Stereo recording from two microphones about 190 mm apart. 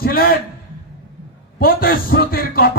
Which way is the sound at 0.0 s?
50° left (ahead or behind).